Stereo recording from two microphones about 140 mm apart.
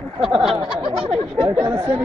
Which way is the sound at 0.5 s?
40° right (ahead or behind).